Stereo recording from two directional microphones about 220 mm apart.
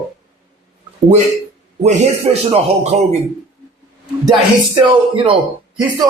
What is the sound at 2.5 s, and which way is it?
Speech, 30° right (ahead or behind).